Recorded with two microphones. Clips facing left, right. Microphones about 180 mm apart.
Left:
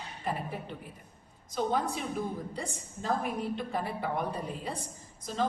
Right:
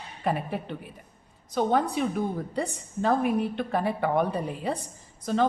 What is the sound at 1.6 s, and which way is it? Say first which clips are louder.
A woman's voice: right 6 dB; 65° right (ahead or behind).